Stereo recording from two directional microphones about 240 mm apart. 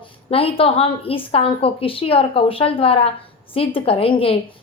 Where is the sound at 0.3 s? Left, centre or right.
Left.